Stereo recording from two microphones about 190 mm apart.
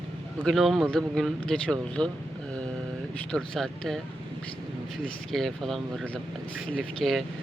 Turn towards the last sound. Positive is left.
turn(degrees=0)  # may be behind; listen again after turning